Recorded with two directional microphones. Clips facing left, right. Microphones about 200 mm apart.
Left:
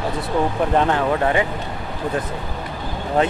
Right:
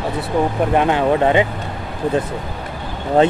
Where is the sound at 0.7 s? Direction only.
15° right (ahead or behind).